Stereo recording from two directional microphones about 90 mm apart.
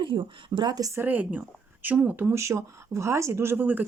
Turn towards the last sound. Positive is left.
turn(degrees=-20)  # may be behind; listen again after turning